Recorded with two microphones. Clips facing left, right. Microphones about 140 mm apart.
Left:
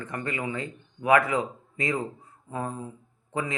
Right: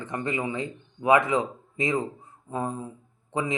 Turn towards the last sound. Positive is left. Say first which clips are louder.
# right 3 dB
turn(degrees=-20)  # may be behind; listen again after turning